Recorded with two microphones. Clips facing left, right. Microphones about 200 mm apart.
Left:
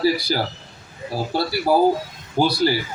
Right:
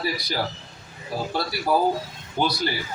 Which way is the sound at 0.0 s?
30° left (ahead or behind).